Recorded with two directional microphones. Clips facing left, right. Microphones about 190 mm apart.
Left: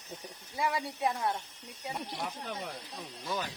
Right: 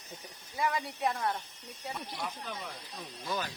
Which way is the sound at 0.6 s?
25° left (ahead or behind).